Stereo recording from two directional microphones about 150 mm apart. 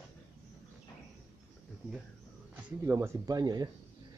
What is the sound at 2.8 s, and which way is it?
Speech, 15° right (ahead or behind).